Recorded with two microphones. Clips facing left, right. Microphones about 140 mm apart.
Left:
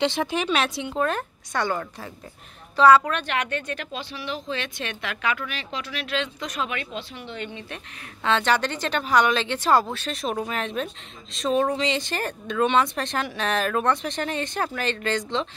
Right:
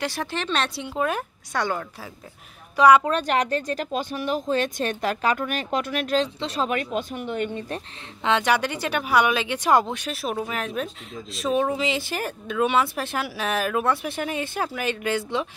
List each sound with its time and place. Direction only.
0.0 s a woman's voice: 20° left (ahead or behind); by 3.0 s 15° right (ahead or behind)
3.0 s speech: 35° right (ahead or behind)
8.2 s speech: 15° right (ahead or behind)